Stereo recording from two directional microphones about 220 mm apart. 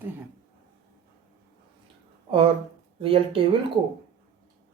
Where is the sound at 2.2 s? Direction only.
25° right (ahead or behind).